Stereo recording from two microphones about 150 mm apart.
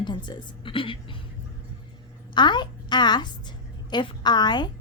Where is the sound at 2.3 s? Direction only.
30° left (ahead or behind).